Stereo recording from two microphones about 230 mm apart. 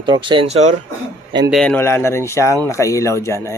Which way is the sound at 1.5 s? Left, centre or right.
Centre.